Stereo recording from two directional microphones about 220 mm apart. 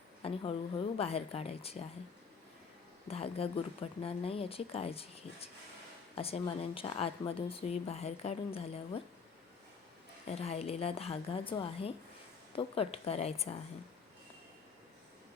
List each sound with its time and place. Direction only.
0.2 s a sound: 25° left (ahead or behind)
0.9 s a woman's voice: 25° left (ahead or behind)
3.1 s a woman's voice: 25° left (ahead or behind)
10.2 s a woman's voice: 30° left (ahead or behind)